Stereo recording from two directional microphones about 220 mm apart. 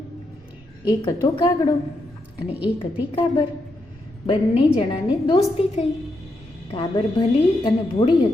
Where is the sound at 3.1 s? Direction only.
25° left (ahead or behind).